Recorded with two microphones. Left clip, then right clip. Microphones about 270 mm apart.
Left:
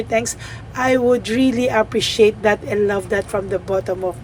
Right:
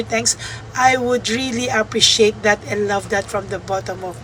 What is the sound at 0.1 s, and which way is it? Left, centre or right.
A woman's voice, centre.